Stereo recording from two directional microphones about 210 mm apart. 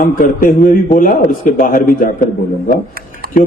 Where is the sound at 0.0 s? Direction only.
40° left (ahead or behind).